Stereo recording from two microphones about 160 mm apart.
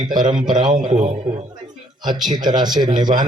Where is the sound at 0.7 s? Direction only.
50° right (ahead or behind).